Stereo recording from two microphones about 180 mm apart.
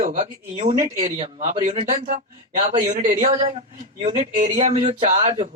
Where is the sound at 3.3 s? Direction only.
30° right (ahead or behind).